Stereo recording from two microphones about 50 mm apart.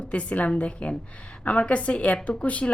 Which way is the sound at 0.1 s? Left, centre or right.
Left.